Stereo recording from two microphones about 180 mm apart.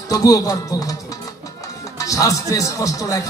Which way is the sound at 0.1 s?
20° left (ahead or behind).